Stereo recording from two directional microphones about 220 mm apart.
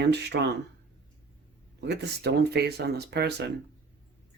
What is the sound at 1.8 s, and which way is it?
Speech, 50° right (ahead or behind).